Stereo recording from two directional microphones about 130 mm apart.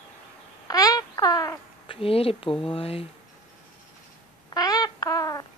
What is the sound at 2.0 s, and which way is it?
Speech, 45° left (ahead or behind).